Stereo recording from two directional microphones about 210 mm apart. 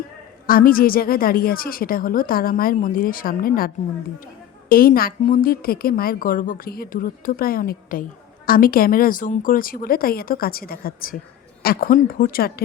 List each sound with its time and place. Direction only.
0.4 s a woman's voice: 45° left (ahead or behind)
4.7 s a woman's voice: 45° left (ahead or behind)